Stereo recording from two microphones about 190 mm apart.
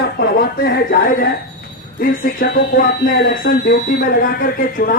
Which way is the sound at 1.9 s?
50° left (ahead or behind).